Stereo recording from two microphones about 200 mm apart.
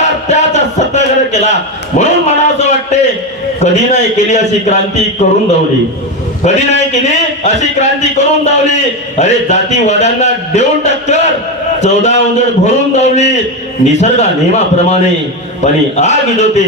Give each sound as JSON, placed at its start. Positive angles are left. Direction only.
{"t": 0.0, "sound": "a sound", "side_deg": 35}
{"t": 2.0, "sound": "a man's voice", "side_deg": 35}
{"t": 6.4, "sound": "a man's voice", "side_deg": 35}